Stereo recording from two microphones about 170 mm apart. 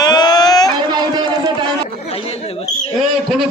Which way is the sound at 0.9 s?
25° right (ahead or behind).